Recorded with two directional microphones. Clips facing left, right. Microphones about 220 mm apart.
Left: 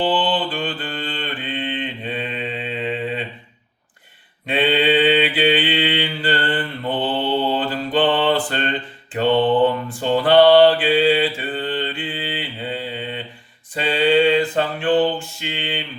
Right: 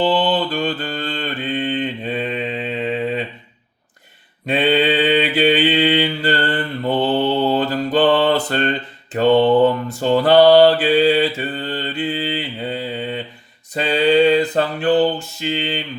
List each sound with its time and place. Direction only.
0.0 s mantra: 40° right (ahead or behind)
4.4 s mantra: 40° right (ahead or behind)